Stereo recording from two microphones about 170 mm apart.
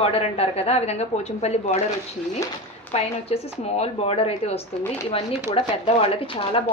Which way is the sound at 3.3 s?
40° left (ahead or behind).